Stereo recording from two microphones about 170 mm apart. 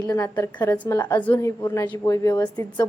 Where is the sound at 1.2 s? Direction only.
15° left (ahead or behind).